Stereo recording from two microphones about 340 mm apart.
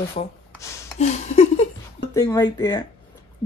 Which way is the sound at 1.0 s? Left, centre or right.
Centre.